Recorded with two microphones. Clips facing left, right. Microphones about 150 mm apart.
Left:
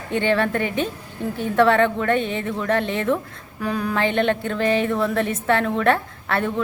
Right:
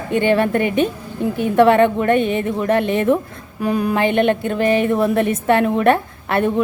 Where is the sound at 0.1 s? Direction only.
15° right (ahead or behind).